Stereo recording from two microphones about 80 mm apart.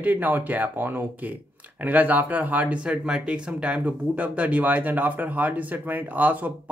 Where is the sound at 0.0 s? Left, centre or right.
Right.